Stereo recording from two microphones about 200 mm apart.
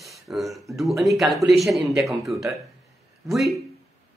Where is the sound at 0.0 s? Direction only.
Centre (ahead or behind).